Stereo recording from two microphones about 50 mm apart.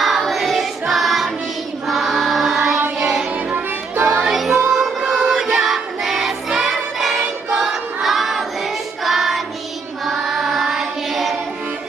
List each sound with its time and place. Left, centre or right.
0.0 s choir: centre
3.0 s music: centre
3.5 s music: right
4.3 s music: centre
4.7 s choir: centre
7.6 s battle cry: centre
9.0 s child singing: centre
10.1 s singing: centre